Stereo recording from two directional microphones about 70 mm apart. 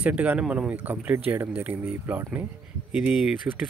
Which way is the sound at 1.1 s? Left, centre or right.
Right.